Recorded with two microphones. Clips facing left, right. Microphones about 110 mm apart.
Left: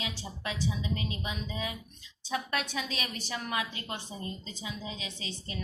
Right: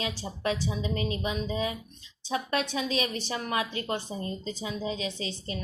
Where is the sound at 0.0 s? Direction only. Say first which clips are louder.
Right 7 dB; 40° right (ahead or behind).